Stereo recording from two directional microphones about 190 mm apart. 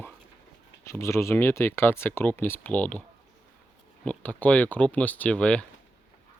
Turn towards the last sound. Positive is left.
turn(degrees=5)  # may be behind; listen again after turning